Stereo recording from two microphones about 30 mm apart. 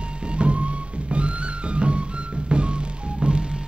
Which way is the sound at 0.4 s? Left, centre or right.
Right.